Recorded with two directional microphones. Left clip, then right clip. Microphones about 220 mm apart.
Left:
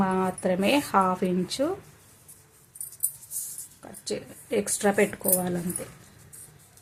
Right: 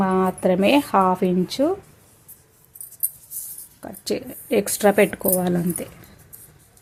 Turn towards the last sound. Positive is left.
turn(degrees=-45)  # may be behind; listen again after turning